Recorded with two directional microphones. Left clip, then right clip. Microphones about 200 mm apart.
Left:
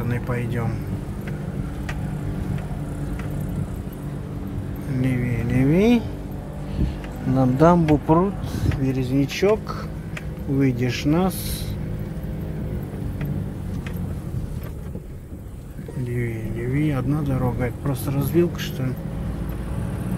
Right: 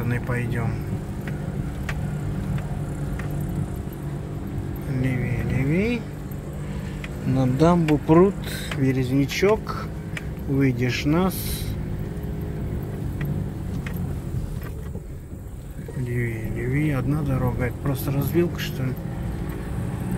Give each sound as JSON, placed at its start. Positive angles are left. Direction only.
{"t": 0.0, "sound": "speech", "side_deg": 0}
{"t": 4.9, "sound": "speech", "side_deg": 15}
{"t": 5.5, "sound": "speech", "side_deg": 25}
{"t": 7.3, "sound": "speech", "side_deg": 10}
{"t": 16.7, "sound": "speech", "side_deg": 5}